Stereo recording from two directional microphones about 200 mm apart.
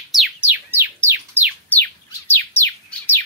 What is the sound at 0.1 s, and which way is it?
Bird, 5° right (ahead or behind).